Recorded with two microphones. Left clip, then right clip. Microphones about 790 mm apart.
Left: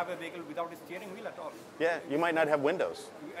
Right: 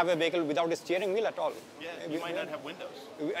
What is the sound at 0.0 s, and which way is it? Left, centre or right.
Speech, right.